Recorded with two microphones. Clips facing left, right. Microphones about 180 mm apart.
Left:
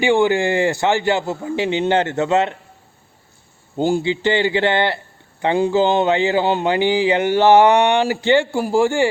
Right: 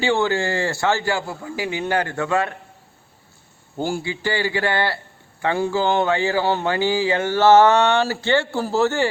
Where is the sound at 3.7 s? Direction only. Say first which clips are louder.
Left 7 dB; 20° left (ahead or behind).